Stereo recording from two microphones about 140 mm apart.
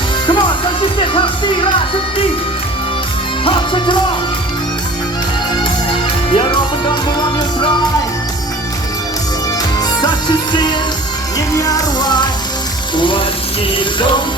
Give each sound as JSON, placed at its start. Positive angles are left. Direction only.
{"t": 0.3, "sound": "music", "side_deg": 35}
{"t": 3.4, "sound": "music", "side_deg": 35}
{"t": 5.9, "sound": "music", "side_deg": 35}
{"t": 10.5, "sound": "music", "side_deg": 35}